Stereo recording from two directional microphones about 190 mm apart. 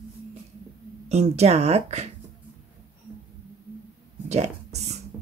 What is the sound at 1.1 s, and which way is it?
Speech, 35° right (ahead or behind).